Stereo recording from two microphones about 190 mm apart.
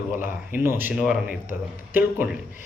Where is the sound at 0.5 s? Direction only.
10° right (ahead or behind).